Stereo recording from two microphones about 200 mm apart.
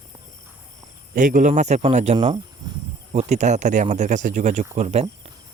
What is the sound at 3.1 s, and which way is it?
A man's voice, 35° right (ahead or behind).